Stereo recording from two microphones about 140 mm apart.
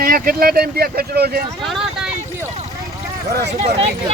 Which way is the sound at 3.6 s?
50° right (ahead or behind).